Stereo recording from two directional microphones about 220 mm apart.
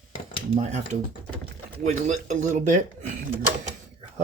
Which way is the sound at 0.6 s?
30° right (ahead or behind).